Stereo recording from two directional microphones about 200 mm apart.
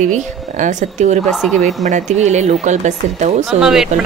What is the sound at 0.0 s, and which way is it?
Speech, 40° right (ahead or behind).